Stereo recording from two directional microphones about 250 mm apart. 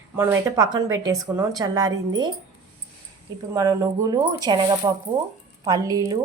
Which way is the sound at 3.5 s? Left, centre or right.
Centre.